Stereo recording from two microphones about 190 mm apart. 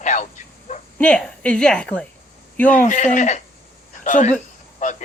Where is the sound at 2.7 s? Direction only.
40° left (ahead or behind).